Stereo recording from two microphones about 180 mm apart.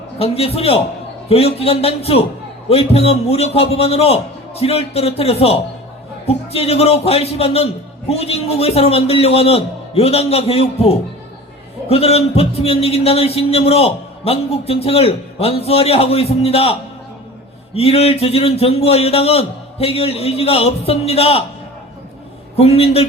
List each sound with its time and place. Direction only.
0.2 s a man's voice: 35° left (ahead or behind)
17.7 s a man's voice: 35° left (ahead or behind)
22.5 s a man's voice: 35° left (ahead or behind)